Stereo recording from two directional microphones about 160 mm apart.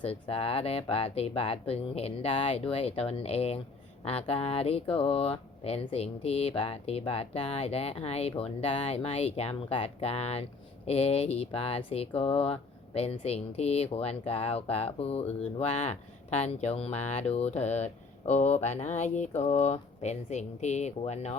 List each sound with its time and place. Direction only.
0.0 s speech: 35° left (ahead or behind)